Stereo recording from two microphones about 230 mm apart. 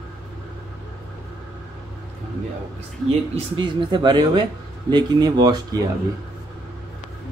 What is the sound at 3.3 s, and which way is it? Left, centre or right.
Speech, right.